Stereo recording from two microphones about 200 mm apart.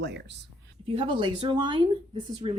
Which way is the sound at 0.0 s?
60° right (ahead or behind).